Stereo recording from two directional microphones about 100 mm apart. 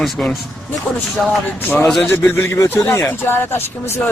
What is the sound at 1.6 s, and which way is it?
A man's voice, 20° left (ahead or behind).